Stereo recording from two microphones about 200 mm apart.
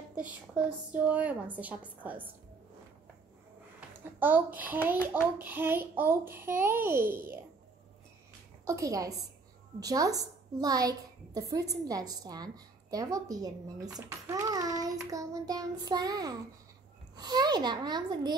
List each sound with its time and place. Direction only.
0.1 s a child's voice: 5° right (ahead or behind)
4.2 s a child's voice: 10° right (ahead or behind)
8.6 s a child's voice: 15° right (ahead or behind)
13.9 s child singing: 15° right (ahead or behind)
17.1 s a child's voice: 20° right (ahead or behind)